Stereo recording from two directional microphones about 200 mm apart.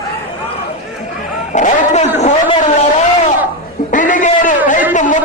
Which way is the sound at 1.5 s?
35° left (ahead or behind).